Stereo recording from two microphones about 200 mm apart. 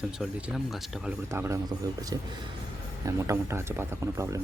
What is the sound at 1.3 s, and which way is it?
Speech, 15° right (ahead or behind).